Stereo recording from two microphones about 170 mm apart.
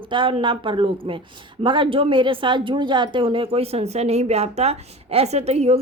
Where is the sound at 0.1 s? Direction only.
30° right (ahead or behind).